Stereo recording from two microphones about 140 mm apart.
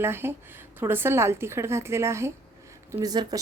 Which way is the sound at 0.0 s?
15° right (ahead or behind).